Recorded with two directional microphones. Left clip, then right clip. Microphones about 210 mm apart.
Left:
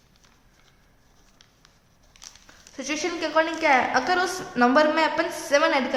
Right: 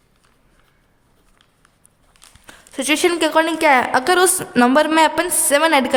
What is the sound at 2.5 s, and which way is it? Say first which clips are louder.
A woman's voice: right 11 dB; 55° right (ahead or behind).